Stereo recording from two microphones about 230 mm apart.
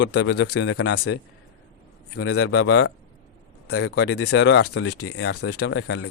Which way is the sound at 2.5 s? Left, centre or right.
Left.